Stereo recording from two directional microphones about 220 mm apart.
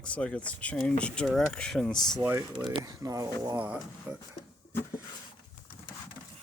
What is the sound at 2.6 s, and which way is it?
Speech, 15° right (ahead or behind).